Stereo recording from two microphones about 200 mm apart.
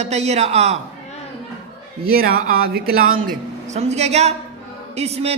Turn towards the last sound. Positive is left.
turn(degrees=-30)  # may be behind; listen again after turning